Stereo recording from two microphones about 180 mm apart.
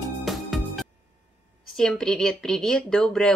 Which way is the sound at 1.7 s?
5° left (ahead or behind).